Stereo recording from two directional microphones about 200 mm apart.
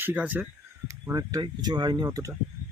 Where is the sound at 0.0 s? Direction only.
10° right (ahead or behind).